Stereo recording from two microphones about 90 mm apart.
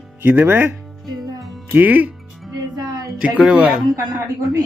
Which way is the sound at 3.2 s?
10° right (ahead or behind).